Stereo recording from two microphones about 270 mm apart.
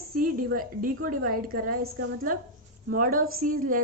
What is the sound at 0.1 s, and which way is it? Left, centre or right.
A woman's voice, right.